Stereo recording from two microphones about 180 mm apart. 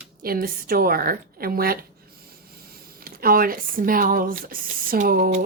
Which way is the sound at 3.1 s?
55° right (ahead or behind).